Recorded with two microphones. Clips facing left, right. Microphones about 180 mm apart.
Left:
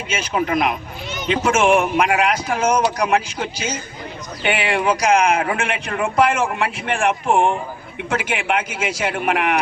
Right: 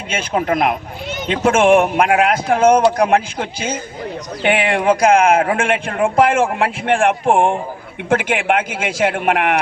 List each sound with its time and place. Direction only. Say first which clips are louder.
0.1 s speech: right 3 dB; 50° right (ahead or behind)